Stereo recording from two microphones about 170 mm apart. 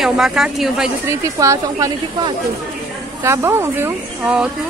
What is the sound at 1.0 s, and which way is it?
A woman's voice, 20° right (ahead or behind).